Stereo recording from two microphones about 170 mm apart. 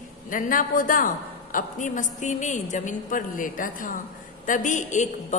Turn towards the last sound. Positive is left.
turn(degrees=45)  # may be behind; listen again after turning